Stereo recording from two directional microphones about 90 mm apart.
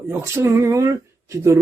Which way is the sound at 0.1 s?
30° right (ahead or behind).